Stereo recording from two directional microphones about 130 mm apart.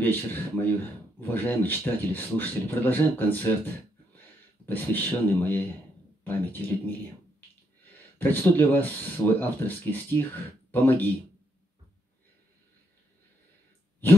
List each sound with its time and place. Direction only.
0.0 s a man's voice: 15° left (ahead or behind)